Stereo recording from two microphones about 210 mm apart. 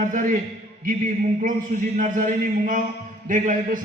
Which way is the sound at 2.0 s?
40° right (ahead or behind).